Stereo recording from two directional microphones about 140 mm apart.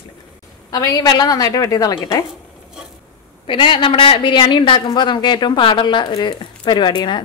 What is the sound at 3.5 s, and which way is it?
A woman's voice, 35° left (ahead or behind).